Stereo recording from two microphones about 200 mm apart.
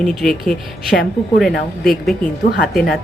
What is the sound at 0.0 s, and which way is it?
A woman's voice, centre (ahead or behind).